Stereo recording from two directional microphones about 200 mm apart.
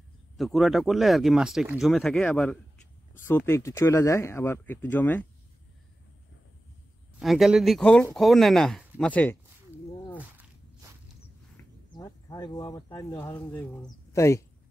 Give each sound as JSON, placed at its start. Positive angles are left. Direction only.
{"t": 0.4, "sound": "speech", "side_deg": 0}
{"t": 7.2, "sound": "speech", "side_deg": 0}
{"t": 11.9, "sound": "speech", "side_deg": 20}
{"t": 13.3, "sound": "speech", "side_deg": 10}